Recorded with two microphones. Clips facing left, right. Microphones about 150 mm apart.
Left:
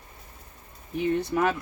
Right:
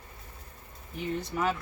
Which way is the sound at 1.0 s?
60° left (ahead or behind).